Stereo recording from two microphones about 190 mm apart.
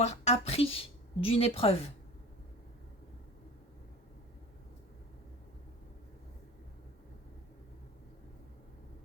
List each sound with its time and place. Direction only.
0.0 s speech: 35° left (ahead or behind)